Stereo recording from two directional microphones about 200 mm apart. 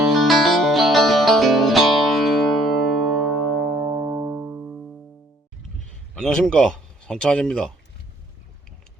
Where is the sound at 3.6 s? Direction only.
55° right (ahead or behind).